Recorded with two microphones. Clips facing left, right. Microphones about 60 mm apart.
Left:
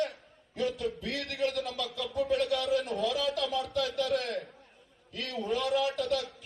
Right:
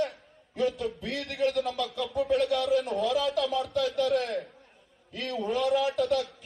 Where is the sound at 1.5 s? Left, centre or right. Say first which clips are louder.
Right 5 dB; centre.